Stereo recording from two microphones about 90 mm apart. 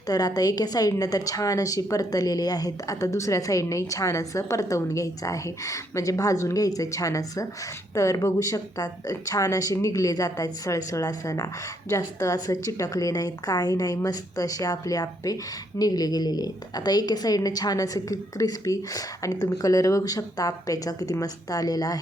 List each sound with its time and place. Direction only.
0.1 s a woman's voice: 45° left (ahead or behind)